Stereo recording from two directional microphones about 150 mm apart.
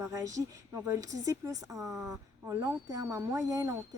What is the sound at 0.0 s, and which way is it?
Speech, 20° right (ahead or behind).